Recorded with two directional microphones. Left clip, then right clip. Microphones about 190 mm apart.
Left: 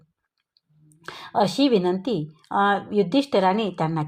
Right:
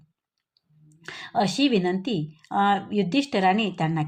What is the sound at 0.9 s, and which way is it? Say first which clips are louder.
A woman's voice: left 1 dB; 25° left (ahead or behind).